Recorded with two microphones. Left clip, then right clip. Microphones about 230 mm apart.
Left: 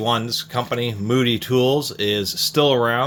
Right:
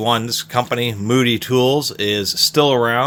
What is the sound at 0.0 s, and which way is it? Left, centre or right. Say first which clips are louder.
Speech: right 3 dB; right.